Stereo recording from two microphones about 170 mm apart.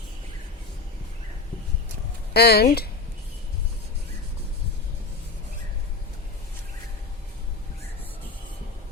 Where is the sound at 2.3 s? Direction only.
70° left (ahead or behind).